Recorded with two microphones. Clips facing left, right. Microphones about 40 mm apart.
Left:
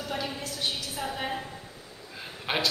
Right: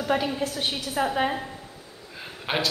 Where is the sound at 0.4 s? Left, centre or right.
Right.